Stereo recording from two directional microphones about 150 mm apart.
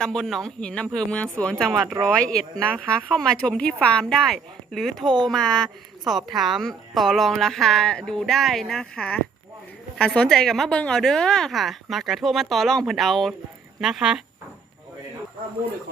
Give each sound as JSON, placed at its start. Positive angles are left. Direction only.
{"t": 0.0, "sound": "a woman's voice", "side_deg": 5}
{"t": 1.7, "sound": "speech", "side_deg": -15}
{"t": 2.0, "sound": "a woman's voice", "side_deg": 10}